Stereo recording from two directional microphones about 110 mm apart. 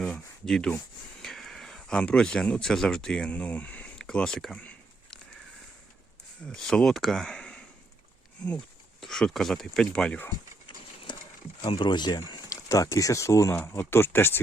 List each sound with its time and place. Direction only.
0.0 s a sound: 5° left (ahead or behind)
1.2 s speech: 5° left (ahead or behind)
6.5 s speech: 5° left (ahead or behind)
11.7 s speech: 50° left (ahead or behind); by 14.3 s 20° left (ahead or behind)